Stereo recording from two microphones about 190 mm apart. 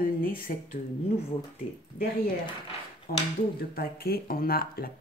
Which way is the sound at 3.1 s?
50° left (ahead or behind).